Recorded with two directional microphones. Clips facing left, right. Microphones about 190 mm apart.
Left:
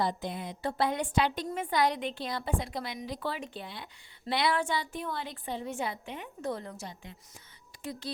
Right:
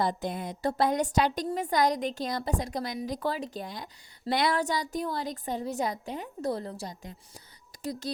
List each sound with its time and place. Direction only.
0.0 s a woman's voice: 45° right (ahead or behind)